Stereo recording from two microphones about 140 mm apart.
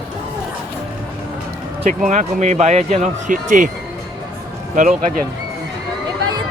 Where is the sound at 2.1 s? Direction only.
60° right (ahead or behind).